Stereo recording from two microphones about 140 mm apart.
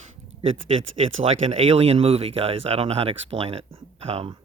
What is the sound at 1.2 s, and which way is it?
Speech, 45° right (ahead or behind).